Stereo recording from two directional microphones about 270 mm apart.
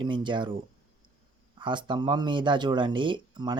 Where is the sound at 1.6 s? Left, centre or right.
Centre.